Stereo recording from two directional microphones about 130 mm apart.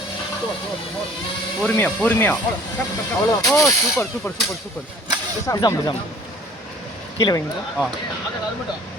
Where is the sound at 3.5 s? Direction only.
25° left (ahead or behind).